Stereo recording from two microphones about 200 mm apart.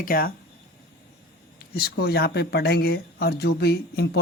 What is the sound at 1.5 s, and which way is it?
Speech, 50° left (ahead or behind).